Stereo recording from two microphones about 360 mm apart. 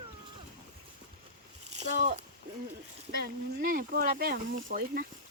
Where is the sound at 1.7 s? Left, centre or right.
Centre.